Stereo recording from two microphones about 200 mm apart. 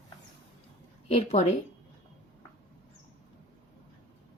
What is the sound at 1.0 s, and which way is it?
Speech, 30° left (ahead or behind).